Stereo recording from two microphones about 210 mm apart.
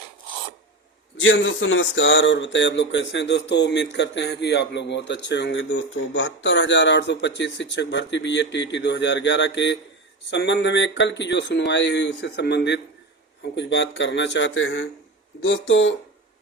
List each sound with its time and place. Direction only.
1.1 s speech: 70° left (ahead or behind)